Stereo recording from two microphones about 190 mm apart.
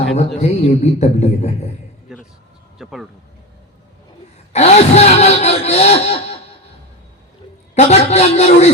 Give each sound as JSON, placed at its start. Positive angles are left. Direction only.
{"t": 0.0, "sound": "a man's voice", "side_deg": 80}
{"t": 0.3, "sound": "a man's voice", "side_deg": 35}
{"t": 2.7, "sound": "a sound", "side_deg": 0}
{"t": 4.5, "sound": "speech", "side_deg": 35}
{"t": 7.8, "sound": "a man's voice", "side_deg": 35}